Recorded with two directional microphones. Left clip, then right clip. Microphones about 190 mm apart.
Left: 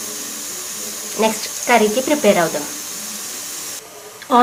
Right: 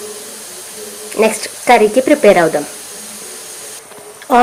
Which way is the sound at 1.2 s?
25° right (ahead or behind).